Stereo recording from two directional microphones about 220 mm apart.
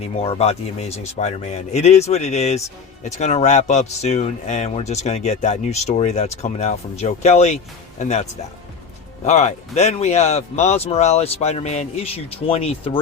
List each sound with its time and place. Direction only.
0.0 s speech: 25° left (ahead or behind)